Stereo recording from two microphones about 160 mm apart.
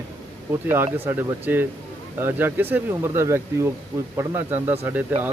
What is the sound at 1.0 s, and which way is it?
Speech, 10° right (ahead or behind).